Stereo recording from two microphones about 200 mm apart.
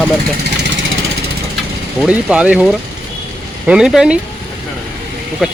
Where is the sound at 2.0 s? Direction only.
5° right (ahead or behind).